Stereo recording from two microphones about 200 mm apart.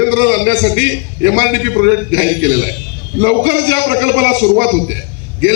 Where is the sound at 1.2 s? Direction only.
70° right (ahead or behind).